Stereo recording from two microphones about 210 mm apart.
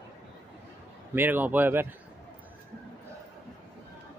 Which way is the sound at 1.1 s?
10° right (ahead or behind).